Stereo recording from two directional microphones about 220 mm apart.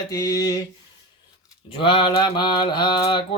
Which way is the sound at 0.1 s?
15° left (ahead or behind).